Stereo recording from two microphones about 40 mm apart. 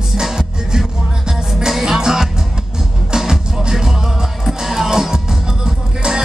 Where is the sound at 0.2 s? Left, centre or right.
Centre.